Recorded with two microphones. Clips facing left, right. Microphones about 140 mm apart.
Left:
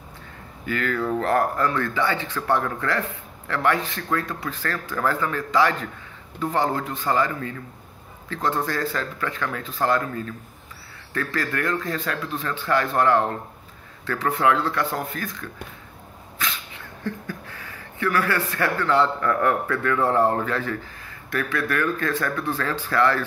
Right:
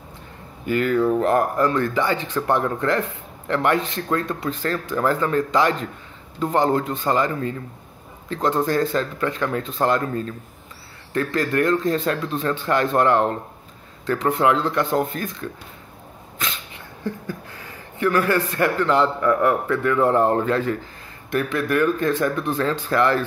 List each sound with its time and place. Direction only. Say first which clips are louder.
0.7 s speech: right 6 dB; 20° right (ahead or behind)
18.0 s speech: right 4 dB; 20° right (ahead or behind)